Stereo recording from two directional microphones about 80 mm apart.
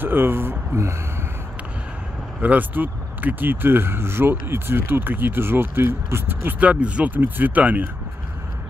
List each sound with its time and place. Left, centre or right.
0.0 s speech: right
2.4 s speech: right